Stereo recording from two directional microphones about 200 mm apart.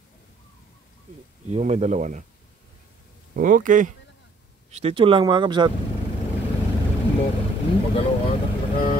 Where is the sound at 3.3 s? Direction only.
40° right (ahead or behind).